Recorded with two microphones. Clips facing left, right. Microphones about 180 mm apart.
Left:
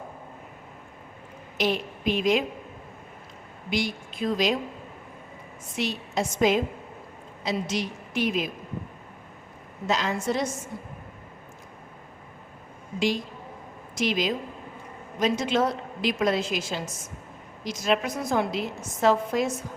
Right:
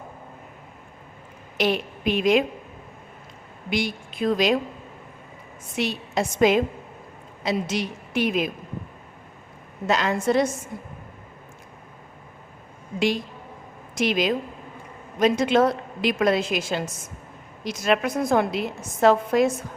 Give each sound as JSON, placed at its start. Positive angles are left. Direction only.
{"t": 1.5, "sound": "a woman's voice", "side_deg": -65}
{"t": 3.7, "sound": "a woman's voice", "side_deg": -65}
{"t": 5.7, "sound": "a woman's voice", "side_deg": -65}
{"t": 9.8, "sound": "a woman's voice", "side_deg": -60}
{"t": 13.9, "sound": "a woman's voice", "side_deg": -60}